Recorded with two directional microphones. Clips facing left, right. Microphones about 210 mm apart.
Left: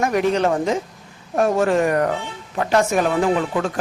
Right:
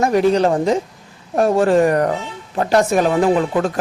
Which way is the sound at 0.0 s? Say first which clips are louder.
Right 4 dB; 35° right (ahead or behind).